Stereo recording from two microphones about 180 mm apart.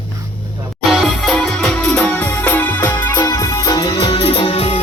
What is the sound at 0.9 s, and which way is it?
Music, centre (ahead or behind).